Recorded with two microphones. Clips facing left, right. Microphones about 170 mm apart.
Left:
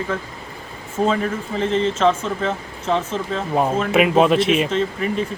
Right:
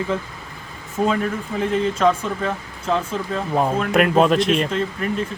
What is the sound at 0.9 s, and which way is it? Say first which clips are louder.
Speech: left 1 dB; centre (ahead or behind).